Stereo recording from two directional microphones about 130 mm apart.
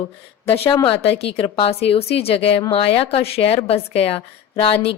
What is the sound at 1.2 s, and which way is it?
A woman's voice, 50° left (ahead or behind).